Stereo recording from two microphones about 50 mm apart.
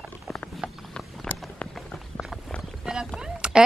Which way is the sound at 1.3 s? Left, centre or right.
Left.